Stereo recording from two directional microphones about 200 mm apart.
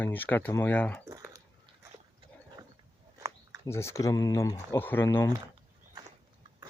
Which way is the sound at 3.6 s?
15° left (ahead or behind).